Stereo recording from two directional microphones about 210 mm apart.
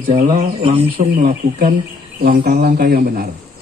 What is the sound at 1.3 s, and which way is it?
Speech, 40° right (ahead or behind).